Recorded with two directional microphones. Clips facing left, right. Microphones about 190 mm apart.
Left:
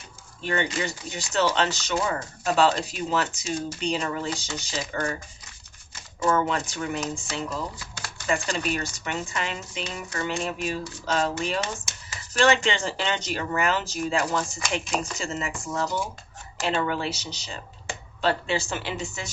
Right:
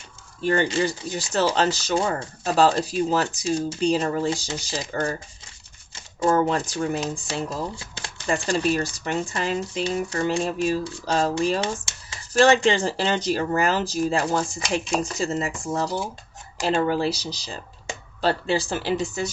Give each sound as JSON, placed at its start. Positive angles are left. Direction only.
{"t": 0.4, "sound": "speech", "side_deg": -40}
{"t": 6.2, "sound": "speech", "side_deg": -35}